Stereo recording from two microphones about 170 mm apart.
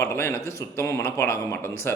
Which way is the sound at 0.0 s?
15° left (ahead or behind).